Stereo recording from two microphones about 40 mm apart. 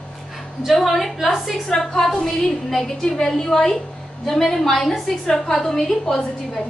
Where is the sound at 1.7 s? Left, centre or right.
Centre.